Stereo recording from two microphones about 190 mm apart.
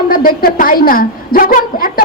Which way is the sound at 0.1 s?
50° left (ahead or behind).